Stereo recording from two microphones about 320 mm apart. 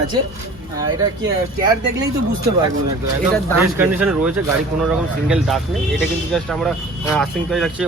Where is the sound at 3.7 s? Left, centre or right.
Centre.